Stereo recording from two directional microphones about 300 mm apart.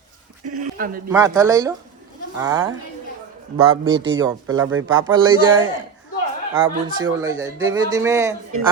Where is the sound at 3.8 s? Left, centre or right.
Right.